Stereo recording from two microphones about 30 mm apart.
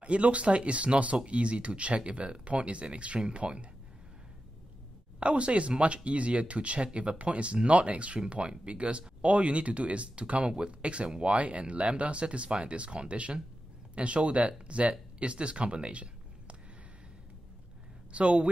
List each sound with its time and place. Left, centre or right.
0.0 s speech: right
5.2 s speech: right
18.1 s speech: right